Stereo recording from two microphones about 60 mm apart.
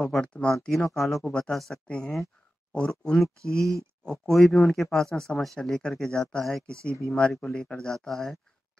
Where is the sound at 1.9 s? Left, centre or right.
Centre.